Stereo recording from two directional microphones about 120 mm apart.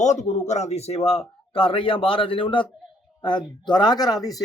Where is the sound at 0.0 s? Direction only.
75° left (ahead or behind); by 1.2 s 60° left (ahead or behind).